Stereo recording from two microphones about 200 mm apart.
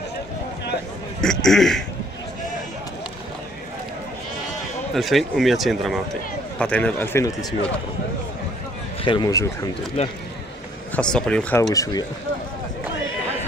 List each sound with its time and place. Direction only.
1.2 s a sound: centre (ahead or behind)
4.9 s speech: centre (ahead or behind)
9.0 s speech: 20° left (ahead or behind)
10.0 s speech: 30° left (ahead or behind)
11.0 s speech: 5° left (ahead or behind)
11.7 s speech: 15° left (ahead or behind)